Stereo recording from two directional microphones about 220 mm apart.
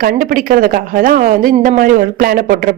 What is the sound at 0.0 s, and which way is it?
Speech, 40° right (ahead or behind).